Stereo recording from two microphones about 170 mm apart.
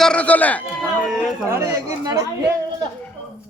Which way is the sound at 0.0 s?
5° left (ahead or behind).